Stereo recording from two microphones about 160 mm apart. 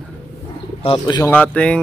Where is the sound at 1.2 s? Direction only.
10° left (ahead or behind).